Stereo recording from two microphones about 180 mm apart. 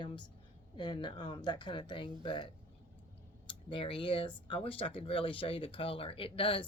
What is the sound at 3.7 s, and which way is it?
Speech, 30° left (ahead or behind).